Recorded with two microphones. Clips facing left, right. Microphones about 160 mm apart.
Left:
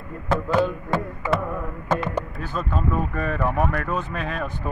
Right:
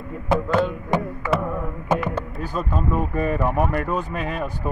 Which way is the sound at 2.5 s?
10° right (ahead or behind).